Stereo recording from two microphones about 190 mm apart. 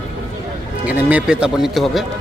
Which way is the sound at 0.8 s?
5° right (ahead or behind).